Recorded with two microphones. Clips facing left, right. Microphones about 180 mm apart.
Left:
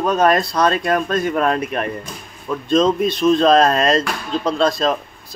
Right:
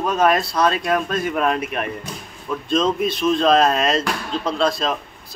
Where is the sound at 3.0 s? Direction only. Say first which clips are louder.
Left 4 dB; 5° right (ahead or behind).